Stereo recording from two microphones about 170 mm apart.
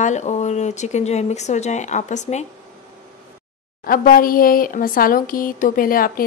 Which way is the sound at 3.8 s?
60° left (ahead or behind).